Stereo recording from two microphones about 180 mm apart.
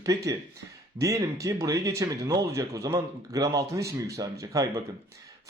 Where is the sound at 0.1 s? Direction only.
20° right (ahead or behind).